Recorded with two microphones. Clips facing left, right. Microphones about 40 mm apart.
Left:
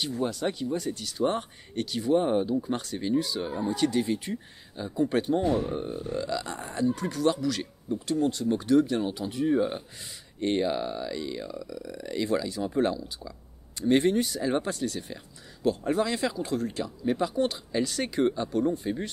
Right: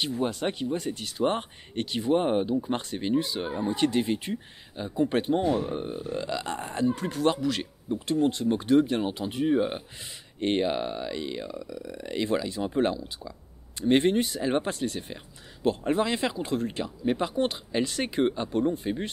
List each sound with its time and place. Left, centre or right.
0.3 s speech: right
3.8 s speech: right
4.3 s speech: centre
5.4 s speech: centre
5.7 s speech: centre